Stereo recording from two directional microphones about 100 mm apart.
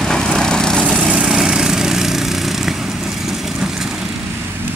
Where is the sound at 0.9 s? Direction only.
10° right (ahead or behind).